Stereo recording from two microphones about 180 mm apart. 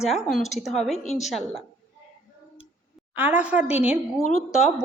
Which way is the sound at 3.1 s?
10° right (ahead or behind).